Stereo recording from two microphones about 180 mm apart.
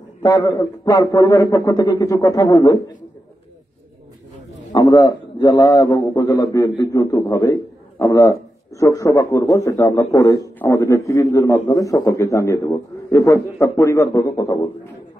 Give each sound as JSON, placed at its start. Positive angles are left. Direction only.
{"t": 0.2, "sound": "a man's voice", "side_deg": 20}
{"t": 4.7, "sound": "a man's voice", "side_deg": 20}